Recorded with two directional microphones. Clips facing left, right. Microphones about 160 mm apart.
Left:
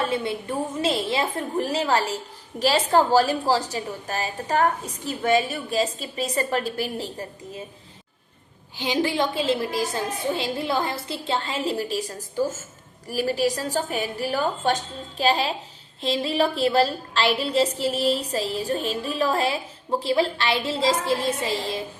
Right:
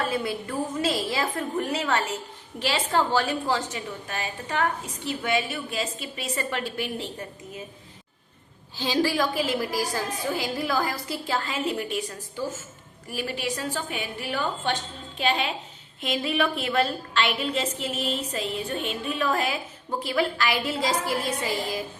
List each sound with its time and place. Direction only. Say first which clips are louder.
0.0 s a woman's voice: left 2 dB; 25° left (ahead or behind)
8.7 s a woman's voice: even; 20° left (ahead or behind)